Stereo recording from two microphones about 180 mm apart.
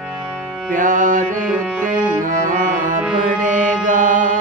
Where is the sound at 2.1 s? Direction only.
45° right (ahead or behind).